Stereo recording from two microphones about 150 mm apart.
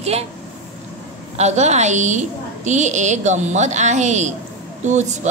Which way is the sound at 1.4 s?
50° right (ahead or behind).